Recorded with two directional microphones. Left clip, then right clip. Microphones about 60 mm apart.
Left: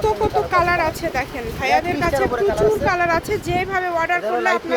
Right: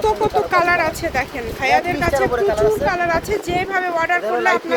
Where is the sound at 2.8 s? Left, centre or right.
Left.